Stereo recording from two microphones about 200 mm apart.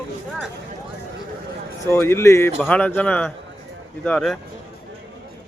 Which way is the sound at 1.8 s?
10° left (ahead or behind).